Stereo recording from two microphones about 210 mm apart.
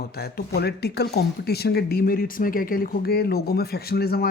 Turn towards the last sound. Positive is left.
turn(degrees=45)  # may be behind; listen again after turning